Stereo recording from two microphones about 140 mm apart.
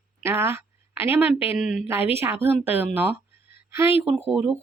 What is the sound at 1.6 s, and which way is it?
Speech, 5° right (ahead or behind).